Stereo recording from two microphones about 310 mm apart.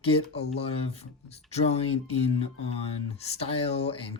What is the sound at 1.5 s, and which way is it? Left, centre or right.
Speech, left.